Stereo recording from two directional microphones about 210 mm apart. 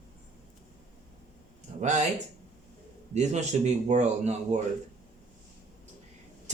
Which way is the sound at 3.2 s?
35° right (ahead or behind).